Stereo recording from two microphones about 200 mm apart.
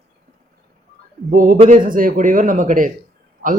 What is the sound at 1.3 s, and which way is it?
A man's voice, 45° right (ahead or behind).